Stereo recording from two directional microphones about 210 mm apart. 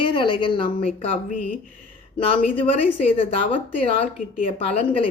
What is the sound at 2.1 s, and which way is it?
A woman's voice, 25° left (ahead or behind).